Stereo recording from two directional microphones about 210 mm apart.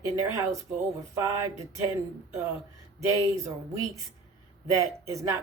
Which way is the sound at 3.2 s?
15° right (ahead or behind).